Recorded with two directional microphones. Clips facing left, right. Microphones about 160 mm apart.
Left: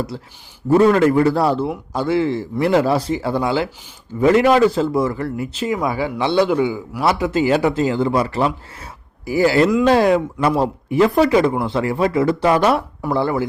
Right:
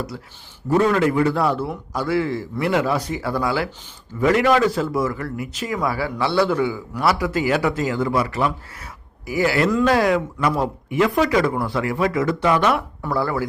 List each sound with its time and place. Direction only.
0.9 s a man's voice: 40° left (ahead or behind)
13.0 s a man's voice: 20° left (ahead or behind)